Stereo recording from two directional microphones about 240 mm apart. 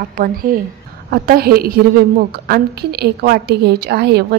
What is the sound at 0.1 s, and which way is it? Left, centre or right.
A woman's voice, right.